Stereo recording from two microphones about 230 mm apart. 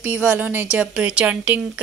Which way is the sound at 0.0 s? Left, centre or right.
Centre.